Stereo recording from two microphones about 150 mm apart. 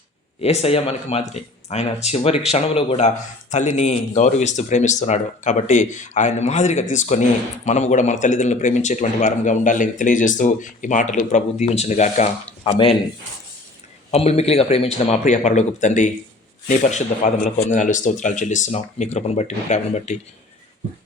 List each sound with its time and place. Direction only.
0.4 s speech: 45° left (ahead or behind)
14.1 s speech: 45° left (ahead or behind)